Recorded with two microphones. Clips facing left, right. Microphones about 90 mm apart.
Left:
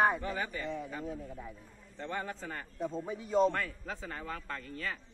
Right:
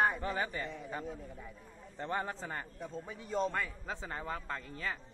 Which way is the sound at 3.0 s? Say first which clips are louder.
Left 6 dB; 5° left (ahead or behind).